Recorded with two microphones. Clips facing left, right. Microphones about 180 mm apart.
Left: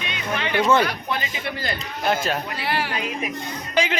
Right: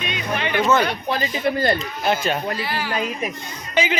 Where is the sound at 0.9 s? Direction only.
35° right (ahead or behind).